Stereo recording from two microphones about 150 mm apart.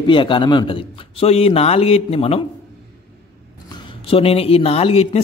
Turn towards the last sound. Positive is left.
turn(degrees=45)  # may be behind; listen again after turning